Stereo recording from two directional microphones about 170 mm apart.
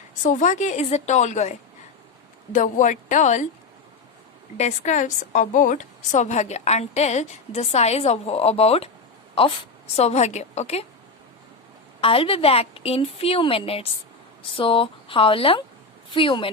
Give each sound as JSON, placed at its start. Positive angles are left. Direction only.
{"t": 0.1, "sound": "a woman's voice", "side_deg": 45}
{"t": 4.5, "sound": "a woman's voice", "side_deg": 45}
{"t": 11.9, "sound": "a woman's voice", "side_deg": 35}